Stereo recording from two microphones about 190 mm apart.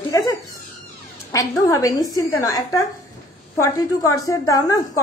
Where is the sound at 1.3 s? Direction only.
15° left (ahead or behind).